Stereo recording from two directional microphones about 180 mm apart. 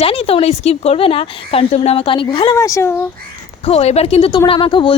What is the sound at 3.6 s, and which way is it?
A woman's voice, 35° left (ahead or behind).